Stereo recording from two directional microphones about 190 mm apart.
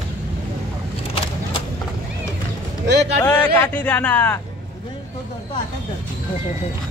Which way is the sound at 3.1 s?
10° left (ahead or behind).